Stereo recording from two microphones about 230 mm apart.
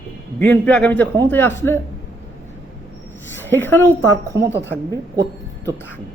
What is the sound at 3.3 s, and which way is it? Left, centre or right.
Speech, centre.